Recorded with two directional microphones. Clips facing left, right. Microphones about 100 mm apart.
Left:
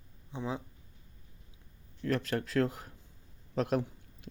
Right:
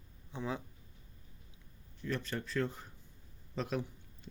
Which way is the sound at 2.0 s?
80° left.